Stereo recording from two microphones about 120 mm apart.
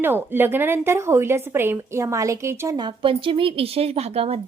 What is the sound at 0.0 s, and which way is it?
A woman's voice, 20° right (ahead or behind).